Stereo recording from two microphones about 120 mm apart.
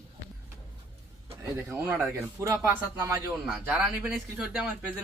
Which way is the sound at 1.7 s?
15° right (ahead or behind).